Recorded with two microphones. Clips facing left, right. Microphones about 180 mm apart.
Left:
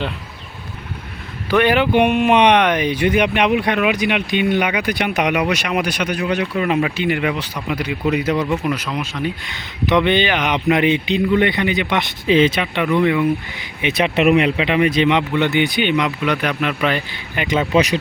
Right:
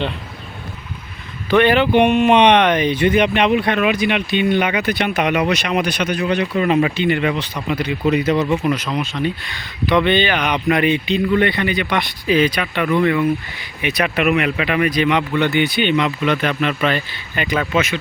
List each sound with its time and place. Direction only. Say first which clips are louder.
1.5 s speech: right 1 dB; 10° left (ahead or behind)
9.8 s speech: even; 15° left (ahead or behind)